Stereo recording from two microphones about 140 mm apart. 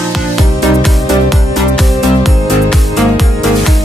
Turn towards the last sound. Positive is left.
turn(degrees=0)  # may be behind; listen again after turning